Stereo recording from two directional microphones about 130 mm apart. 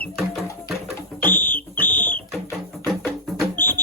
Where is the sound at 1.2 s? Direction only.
15° left (ahead or behind).